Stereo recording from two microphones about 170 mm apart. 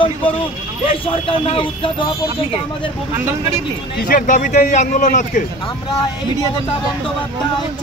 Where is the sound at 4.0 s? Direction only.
55° left (ahead or behind).